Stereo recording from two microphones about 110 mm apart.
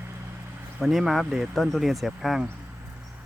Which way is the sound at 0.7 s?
5° right (ahead or behind).